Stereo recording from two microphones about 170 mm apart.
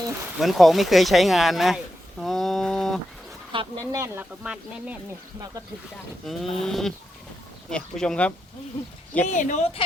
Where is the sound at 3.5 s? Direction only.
30° right (ahead or behind).